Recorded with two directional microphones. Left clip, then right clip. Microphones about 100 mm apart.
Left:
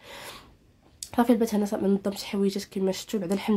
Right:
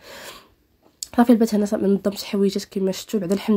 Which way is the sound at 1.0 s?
35° right (ahead or behind).